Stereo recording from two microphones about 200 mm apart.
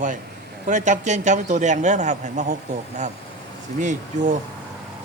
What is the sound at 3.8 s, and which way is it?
Speech, 40° right (ahead or behind).